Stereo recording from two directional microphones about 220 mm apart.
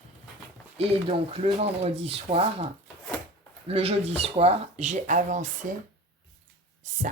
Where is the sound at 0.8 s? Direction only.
25° right (ahead or behind).